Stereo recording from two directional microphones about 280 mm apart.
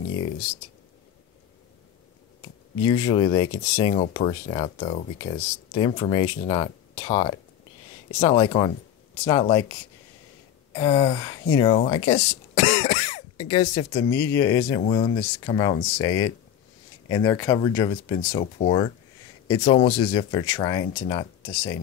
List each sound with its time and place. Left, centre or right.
3.1 s speech: centre
3.9 s speech: left
18.4 s speech: left